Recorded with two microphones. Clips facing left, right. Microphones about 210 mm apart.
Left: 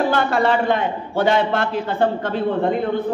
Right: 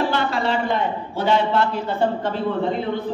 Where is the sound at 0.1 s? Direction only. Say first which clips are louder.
Left 4 dB; 55° left (ahead or behind).